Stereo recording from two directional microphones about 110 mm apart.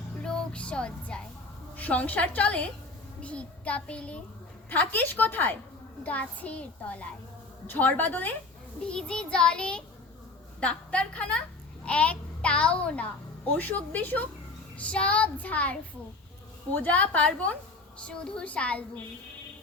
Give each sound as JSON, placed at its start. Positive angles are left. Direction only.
{"t": 0.2, "sound": "music", "side_deg": 10}
{"t": 1.7, "sound": "a child's voice", "side_deg": 15}